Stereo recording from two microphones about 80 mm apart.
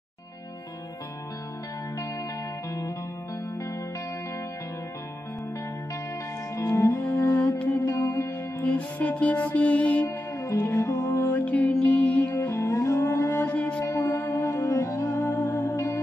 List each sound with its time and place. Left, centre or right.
6.5 s music: left
7.0 s cello: left
7.9 s music: left
8.6 s music: centre
10.0 s music: left
11.3 s music: centre
12.4 s music: left
13.4 s music: centre
13.8 s music: left